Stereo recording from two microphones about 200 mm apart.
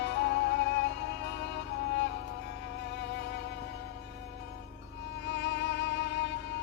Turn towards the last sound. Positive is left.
turn(degrees=60)  # may be behind; listen again after turning